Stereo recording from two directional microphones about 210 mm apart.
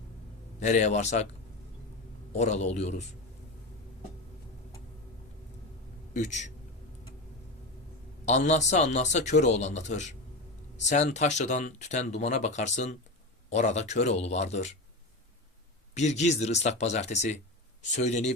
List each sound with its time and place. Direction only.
0.6 s speech: 35° left (ahead or behind)
2.3 s speech: 30° left (ahead or behind)
6.1 s speech: 35° left (ahead or behind)
8.2 s speech: 35° left (ahead or behind)
16.0 s speech: 35° left (ahead or behind)